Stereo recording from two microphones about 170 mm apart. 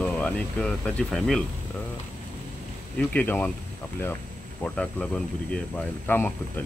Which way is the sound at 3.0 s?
10° left (ahead or behind).